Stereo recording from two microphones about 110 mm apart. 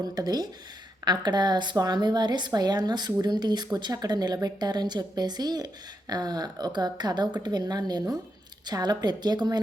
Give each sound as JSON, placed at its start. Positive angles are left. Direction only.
{"t": 0.1, "sound": "a woman's voice", "side_deg": -35}